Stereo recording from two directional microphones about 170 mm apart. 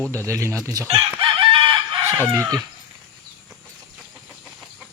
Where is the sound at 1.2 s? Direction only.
30° right (ahead or behind).